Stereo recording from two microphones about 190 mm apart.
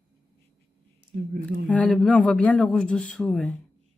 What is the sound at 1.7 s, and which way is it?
Speech, 5° left (ahead or behind).